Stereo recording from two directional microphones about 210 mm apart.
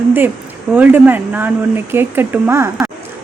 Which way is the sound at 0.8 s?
10° right (ahead or behind).